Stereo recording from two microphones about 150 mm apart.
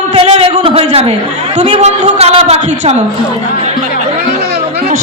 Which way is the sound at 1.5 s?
50° right (ahead or behind).